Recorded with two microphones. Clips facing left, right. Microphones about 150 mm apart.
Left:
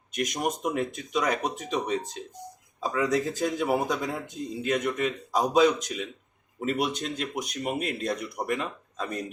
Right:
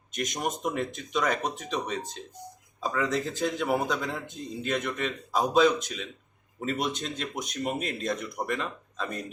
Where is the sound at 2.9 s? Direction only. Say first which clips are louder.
Left 3 dB; 15° left (ahead or behind).